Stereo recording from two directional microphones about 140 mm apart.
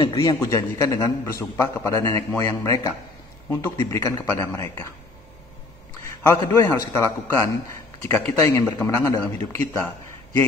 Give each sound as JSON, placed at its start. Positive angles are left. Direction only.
{"t": 0.1, "sound": "a man's voice", "side_deg": 25}
{"t": 6.2, "sound": "a man's voice", "side_deg": 25}